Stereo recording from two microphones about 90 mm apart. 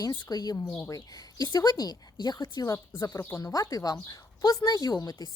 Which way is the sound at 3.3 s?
40° left (ahead or behind).